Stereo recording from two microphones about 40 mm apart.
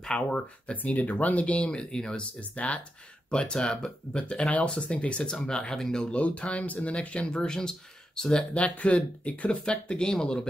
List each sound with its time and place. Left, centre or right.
0.0 s speech: left
2.5 s speech: left
3.3 s speech: centre
6.0 s speech: left
7.3 s speech: centre
8.5 s speech: left; by 10.5 s centre